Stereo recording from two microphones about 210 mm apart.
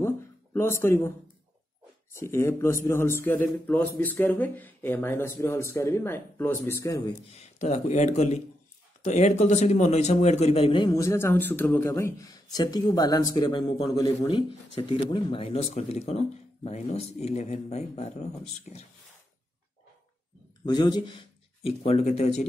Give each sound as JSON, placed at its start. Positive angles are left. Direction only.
{"t": 0.0, "sound": "a sound", "side_deg": 10}
{"t": 2.1, "sound": "speech", "side_deg": 15}
{"t": 7.2, "sound": "a man's voice", "side_deg": 30}
{"t": 20.6, "sound": "speech", "side_deg": 20}